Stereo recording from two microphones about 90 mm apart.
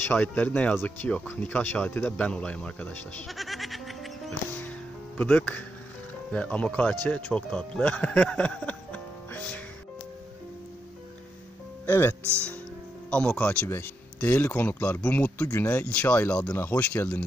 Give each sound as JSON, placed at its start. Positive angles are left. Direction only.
{"t": 0.1, "sound": "speech", "side_deg": 20}
{"t": 3.3, "sound": "music", "side_deg": 0}
{"t": 4.6, "sound": "music", "side_deg": 15}
{"t": 6.3, "sound": "speech", "side_deg": 15}
{"t": 11.8, "sound": "speech", "side_deg": 25}
{"t": 13.1, "sound": "speech", "side_deg": 10}